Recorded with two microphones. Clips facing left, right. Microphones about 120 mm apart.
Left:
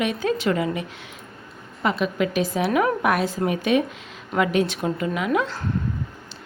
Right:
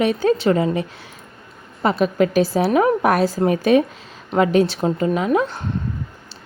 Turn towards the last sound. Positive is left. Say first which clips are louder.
# right 4 dB
turn(degrees=-25)  # may be behind; listen again after turning